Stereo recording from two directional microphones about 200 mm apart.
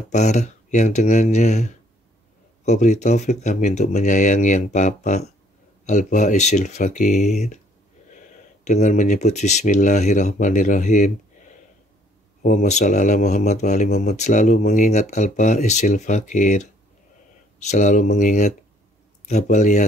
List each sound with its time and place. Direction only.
0.1 s speech: 35° left (ahead or behind)
8.6 s speech: 35° left (ahead or behind)
12.4 s speech: 35° left (ahead or behind)
17.6 s speech: 40° left (ahead or behind)